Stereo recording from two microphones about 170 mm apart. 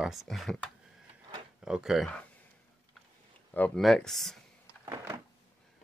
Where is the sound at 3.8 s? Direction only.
Centre (ahead or behind).